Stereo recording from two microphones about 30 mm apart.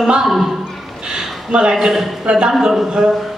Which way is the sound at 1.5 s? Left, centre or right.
Right.